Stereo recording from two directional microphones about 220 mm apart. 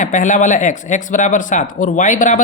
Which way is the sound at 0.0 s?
35° left (ahead or behind).